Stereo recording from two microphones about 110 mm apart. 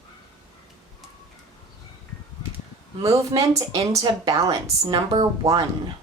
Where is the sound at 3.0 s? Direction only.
30° right (ahead or behind).